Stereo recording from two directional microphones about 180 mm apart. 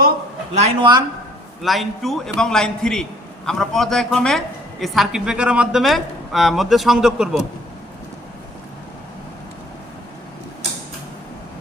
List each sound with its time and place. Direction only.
0.5 s speech: 35° right (ahead or behind)
1.6 s a man's voice: centre (ahead or behind)